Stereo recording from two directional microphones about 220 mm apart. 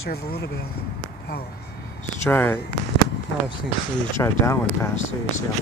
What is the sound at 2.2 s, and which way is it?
Speech, 10° left (ahead or behind).